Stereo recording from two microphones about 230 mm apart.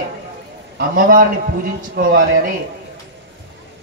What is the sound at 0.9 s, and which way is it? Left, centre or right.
Speech, right.